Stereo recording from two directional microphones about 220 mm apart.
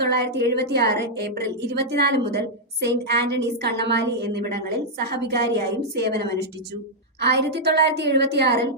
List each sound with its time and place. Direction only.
0.0 s a woman's voice: 50° right (ahead or behind)